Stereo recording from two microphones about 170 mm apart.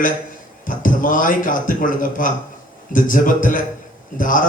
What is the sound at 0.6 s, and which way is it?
A man's voice, 50° left (ahead or behind).